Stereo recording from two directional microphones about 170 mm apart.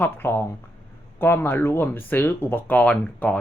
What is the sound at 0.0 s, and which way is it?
Speech, 15° left (ahead or behind).